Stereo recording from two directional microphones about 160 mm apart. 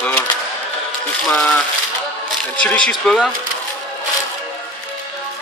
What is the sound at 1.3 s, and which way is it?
Speech, 10° left (ahead or behind).